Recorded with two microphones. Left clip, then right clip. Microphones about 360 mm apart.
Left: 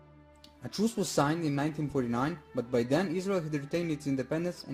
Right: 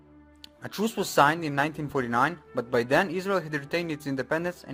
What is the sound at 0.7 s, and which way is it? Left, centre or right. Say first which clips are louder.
Speech: right 2 dB; right.